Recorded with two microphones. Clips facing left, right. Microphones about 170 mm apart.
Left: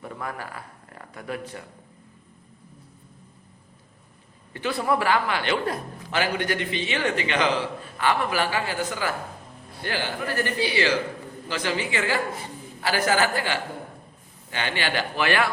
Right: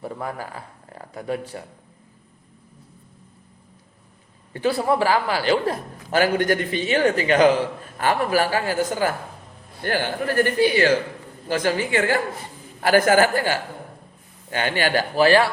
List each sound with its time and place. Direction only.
0.0 s speech: 30° right (ahead or behind)
4.5 s a man's voice: 35° right (ahead or behind)